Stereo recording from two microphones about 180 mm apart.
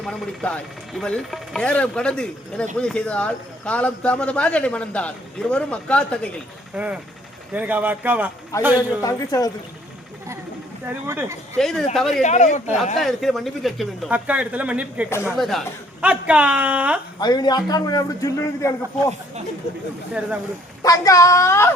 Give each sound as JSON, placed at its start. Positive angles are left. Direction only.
{"t": 0.0, "sound": "a man's voice", "side_deg": 5}
{"t": 6.7, "sound": "speech", "side_deg": -5}
{"t": 8.5, "sound": "a man's voice", "side_deg": 15}
{"t": 10.8, "sound": "speech", "side_deg": -10}
{"t": 11.5, "sound": "speech", "side_deg": 0}
{"t": 12.2, "sound": "speech", "side_deg": 40}
{"t": 13.0, "sound": "speech", "side_deg": 0}
{"t": 17.2, "sound": "a man's voice", "side_deg": 20}
{"t": 20.8, "sound": "a man's voice", "side_deg": 20}